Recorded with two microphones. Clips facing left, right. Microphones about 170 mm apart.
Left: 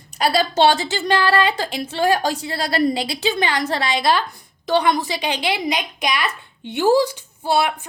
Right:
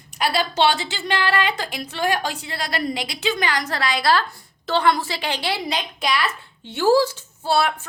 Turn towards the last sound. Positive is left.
turn(degrees=15)  # may be behind; listen again after turning